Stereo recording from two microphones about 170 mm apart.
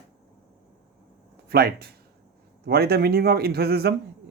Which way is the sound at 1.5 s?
65° right (ahead or behind).